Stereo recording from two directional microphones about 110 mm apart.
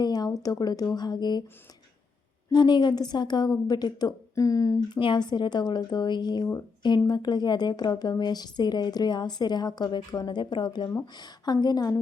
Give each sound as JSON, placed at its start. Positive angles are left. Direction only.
{"t": 0.0, "sound": "a sound", "side_deg": 35}
{"t": 0.6, "sound": "a woman's voice", "side_deg": 40}
{"t": 2.5, "sound": "a woman's voice", "side_deg": 40}
{"t": 4.9, "sound": "a woman's voice", "side_deg": 45}